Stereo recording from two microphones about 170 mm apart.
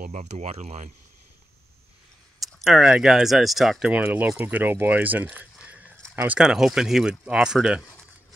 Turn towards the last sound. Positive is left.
turn(degrees=-5)  # may be behind; listen again after turning